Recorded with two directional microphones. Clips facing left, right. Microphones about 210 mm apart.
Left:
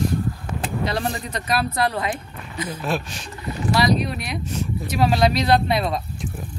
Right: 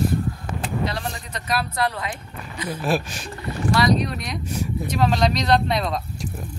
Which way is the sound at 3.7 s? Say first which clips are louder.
Even; 5° left (ahead or behind).